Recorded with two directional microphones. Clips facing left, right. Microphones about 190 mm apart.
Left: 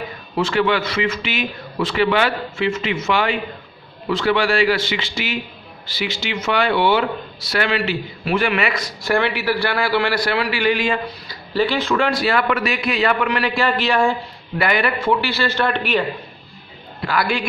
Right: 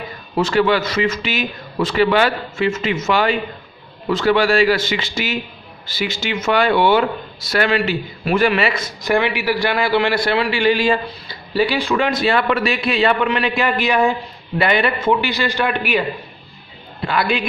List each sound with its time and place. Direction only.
0.4 s a man's voice: 40° right (ahead or behind)
11.5 s a man's voice: 10° right (ahead or behind)
17.0 s a man's voice: 25° right (ahead or behind)